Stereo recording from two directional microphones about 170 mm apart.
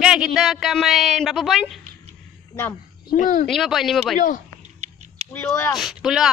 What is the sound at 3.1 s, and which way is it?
Speech, 55° left (ahead or behind).